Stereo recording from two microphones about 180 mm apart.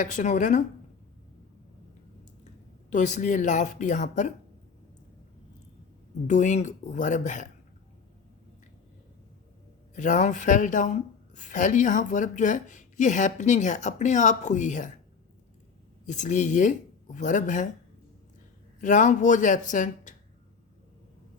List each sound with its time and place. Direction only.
0.0 s speech: 45° left (ahead or behind)
2.9 s speech: 45° left (ahead or behind)
6.2 s speech: 40° left (ahead or behind)
9.9 s speech: 45° left (ahead or behind)
16.0 s speech: 45° left (ahead or behind)
18.8 s speech: 45° left (ahead or behind)